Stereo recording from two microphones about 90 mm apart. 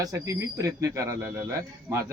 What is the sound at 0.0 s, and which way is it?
Speech, 40° right (ahead or behind).